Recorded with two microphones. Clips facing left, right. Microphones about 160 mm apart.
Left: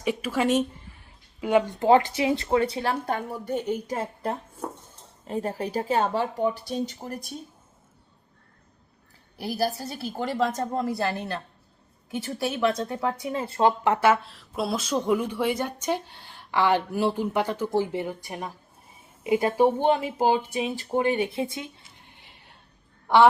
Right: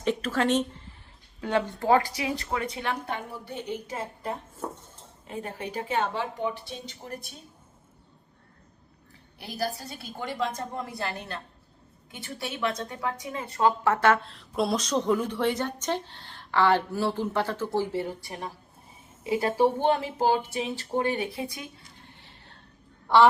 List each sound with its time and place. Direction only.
0.0 s speech: 10° left (ahead or behind); by 4.3 s 40° left (ahead or behind)
5.3 s speech: 35° left (ahead or behind)
9.4 s speech: 35° left (ahead or behind)
12.4 s speech: 35° left (ahead or behind)
13.9 s speech: 10° left (ahead or behind); by 21.7 s 25° left (ahead or behind)
22.2 s a sound: 15° left (ahead or behind)